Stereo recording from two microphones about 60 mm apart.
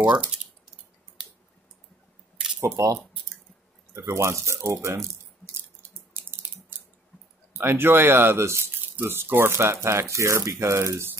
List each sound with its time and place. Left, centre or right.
0.1 s speech: centre
2.6 s speech: right
7.5 s speech: right